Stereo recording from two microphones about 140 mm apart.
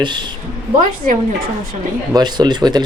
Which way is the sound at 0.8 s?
75° right (ahead or behind).